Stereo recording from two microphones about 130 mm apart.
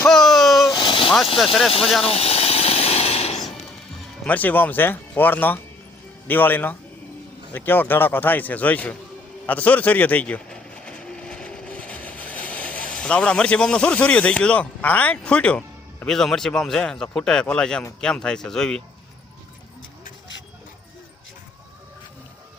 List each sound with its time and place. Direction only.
0.1 s a sound: centre (ahead or behind)
0.7 s vehicle: 40° left (ahead or behind)
2.0 s hiss: 50° left (ahead or behind)
4.3 s a man's voice: 15° left (ahead or behind)